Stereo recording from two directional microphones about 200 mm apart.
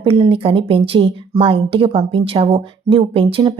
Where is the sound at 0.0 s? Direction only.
25° right (ahead or behind).